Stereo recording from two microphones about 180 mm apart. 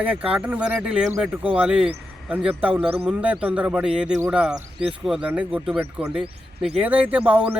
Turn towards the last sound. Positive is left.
turn(degrees=-10)  # may be behind; listen again after turning